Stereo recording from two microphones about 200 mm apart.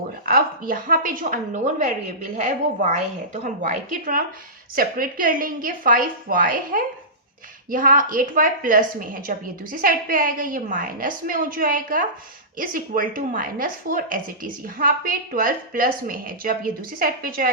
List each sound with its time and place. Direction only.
0.3 s a woman's voice: 45° right (ahead or behind)